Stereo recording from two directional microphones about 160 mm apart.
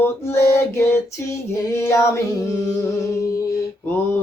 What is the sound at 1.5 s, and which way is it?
Singing, 15° left (ahead or behind).